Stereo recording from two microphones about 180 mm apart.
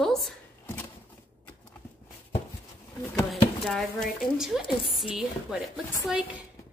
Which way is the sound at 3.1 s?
Centre (ahead or behind).